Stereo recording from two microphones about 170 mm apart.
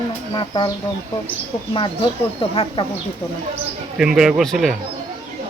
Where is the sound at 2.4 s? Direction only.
30° left (ahead or behind).